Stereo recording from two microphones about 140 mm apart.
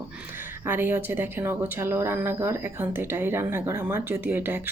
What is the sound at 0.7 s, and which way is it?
A woman's voice, 15° right (ahead or behind).